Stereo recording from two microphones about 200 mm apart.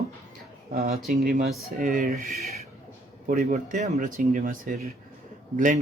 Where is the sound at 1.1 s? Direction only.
40° right (ahead or behind).